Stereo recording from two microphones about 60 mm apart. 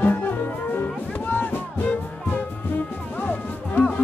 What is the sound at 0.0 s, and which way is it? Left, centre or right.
Music, left.